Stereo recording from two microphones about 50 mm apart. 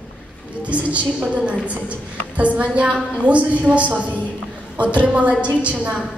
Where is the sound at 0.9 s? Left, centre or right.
Right.